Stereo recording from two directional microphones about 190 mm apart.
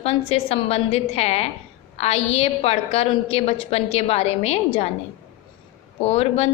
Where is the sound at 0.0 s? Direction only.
30° left (ahead or behind).